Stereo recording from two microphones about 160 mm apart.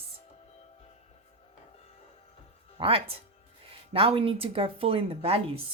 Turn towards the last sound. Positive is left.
turn(degrees=-35)  # may be behind; listen again after turning